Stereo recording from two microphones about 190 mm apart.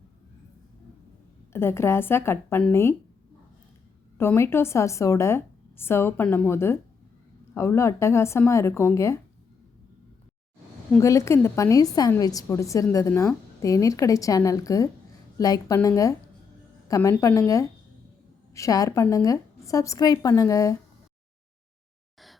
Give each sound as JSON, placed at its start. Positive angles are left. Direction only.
{"t": 1.5, "sound": "a woman's voice", "side_deg": 15}
{"t": 4.2, "sound": "a woman's voice", "side_deg": 10}
{"t": 11.0, "sound": "a woman's voice", "side_deg": 15}